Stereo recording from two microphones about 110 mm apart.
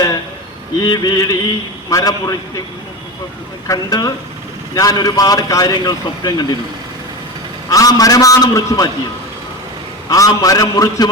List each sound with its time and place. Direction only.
0.8 s a man's voice: 35° left (ahead or behind)
3.7 s a man's voice: 35° left (ahead or behind)
7.7 s a man's voice: 35° left (ahead or behind)
10.1 s a man's voice: 35° left (ahead or behind)